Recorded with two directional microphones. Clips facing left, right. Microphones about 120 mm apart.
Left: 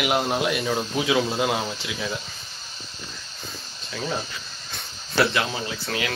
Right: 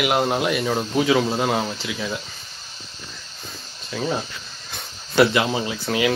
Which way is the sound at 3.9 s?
5° right (ahead or behind).